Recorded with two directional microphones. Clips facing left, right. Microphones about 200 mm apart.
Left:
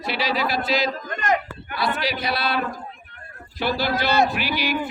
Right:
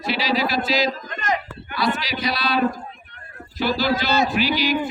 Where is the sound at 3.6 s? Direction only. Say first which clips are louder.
Right 2 dB; 55° left (ahead or behind).